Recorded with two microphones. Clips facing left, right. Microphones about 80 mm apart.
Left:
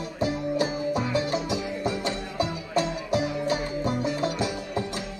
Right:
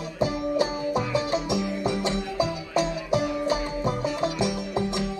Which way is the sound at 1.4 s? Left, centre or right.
Centre.